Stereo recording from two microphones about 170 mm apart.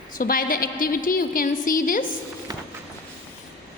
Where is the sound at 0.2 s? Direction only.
55° left (ahead or behind).